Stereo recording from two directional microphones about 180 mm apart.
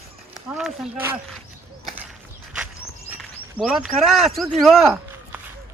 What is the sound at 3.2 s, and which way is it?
Speech, 5° right (ahead or behind).